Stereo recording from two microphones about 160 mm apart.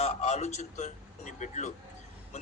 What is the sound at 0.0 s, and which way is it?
A man's voice, 40° left (ahead or behind).